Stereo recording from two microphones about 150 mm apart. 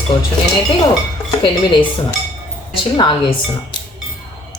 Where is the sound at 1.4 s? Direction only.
35° left (ahead or behind).